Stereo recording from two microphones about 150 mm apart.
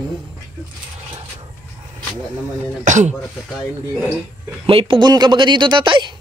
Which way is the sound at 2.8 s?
55° right (ahead or behind).